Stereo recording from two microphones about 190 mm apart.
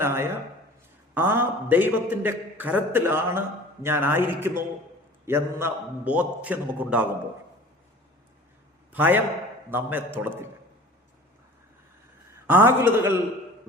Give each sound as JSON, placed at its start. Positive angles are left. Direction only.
{"t": 0.0, "sound": "a man's voice", "side_deg": -15}
{"t": 8.9, "sound": "a man's voice", "side_deg": -10}
{"t": 12.5, "sound": "a man's voice", "side_deg": -10}